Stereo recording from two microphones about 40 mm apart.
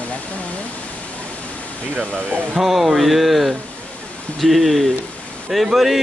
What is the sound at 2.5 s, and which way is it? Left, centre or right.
Speech, centre.